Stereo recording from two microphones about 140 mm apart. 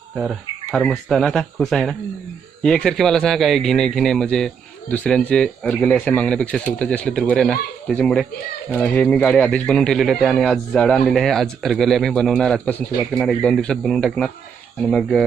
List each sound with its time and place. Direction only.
0.2 s a man's voice: centre (ahead or behind)